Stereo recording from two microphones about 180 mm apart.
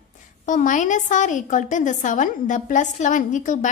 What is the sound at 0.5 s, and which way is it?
A woman's voice, 45° left (ahead or behind).